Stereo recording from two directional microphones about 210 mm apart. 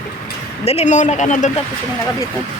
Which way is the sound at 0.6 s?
30° left (ahead or behind).